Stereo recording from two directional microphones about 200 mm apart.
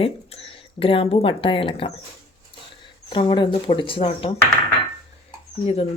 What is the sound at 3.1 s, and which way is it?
Speech, 25° left (ahead or behind).